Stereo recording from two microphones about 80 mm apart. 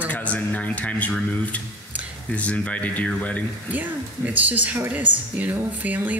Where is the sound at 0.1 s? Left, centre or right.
Centre.